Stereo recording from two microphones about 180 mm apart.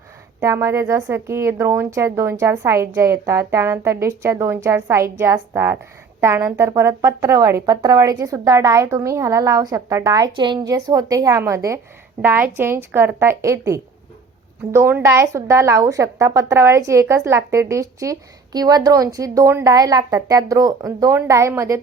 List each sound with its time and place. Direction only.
0.3 s a woman's voice: 15° right (ahead or behind)